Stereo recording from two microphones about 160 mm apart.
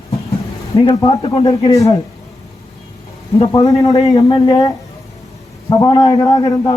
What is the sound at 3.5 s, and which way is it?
A man's voice, 20° left (ahead or behind).